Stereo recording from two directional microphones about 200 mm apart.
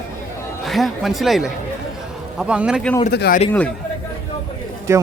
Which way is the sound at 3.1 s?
50° left (ahead or behind).